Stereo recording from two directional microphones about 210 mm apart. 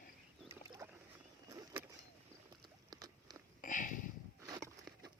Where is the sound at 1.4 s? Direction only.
15° right (ahead or behind).